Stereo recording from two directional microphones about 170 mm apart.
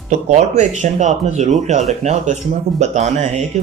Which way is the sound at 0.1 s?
40° right (ahead or behind).